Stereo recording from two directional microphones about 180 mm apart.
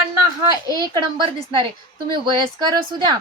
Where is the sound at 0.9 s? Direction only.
25° right (ahead or behind).